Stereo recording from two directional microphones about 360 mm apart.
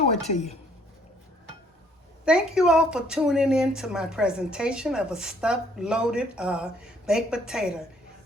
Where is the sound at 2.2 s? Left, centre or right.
Centre.